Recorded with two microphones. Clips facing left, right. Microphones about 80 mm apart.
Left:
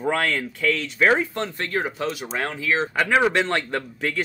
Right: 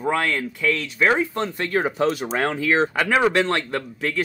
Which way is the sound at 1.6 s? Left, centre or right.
Right.